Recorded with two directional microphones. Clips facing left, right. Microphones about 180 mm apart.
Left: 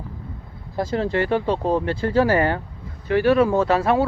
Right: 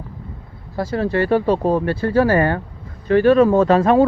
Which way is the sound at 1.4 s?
10° right (ahead or behind).